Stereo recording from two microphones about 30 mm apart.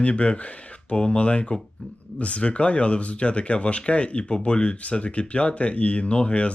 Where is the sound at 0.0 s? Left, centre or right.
Left.